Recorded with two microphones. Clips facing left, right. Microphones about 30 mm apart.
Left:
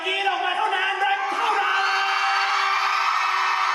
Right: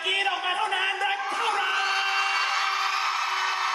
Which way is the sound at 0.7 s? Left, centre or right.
Centre.